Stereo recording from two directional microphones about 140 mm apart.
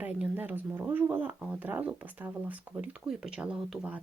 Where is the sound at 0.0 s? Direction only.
10° right (ahead or behind).